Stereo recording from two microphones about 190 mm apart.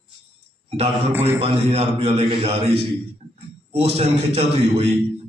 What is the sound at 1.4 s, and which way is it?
A man's voice, 35° right (ahead or behind).